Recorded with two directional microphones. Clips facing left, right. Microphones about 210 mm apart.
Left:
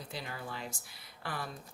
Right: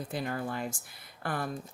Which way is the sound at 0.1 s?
50° right (ahead or behind).